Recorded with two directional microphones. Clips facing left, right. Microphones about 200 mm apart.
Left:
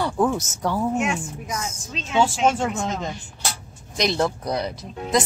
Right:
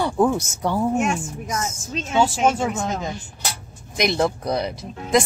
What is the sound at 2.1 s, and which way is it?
Speech, 5° right (ahead or behind).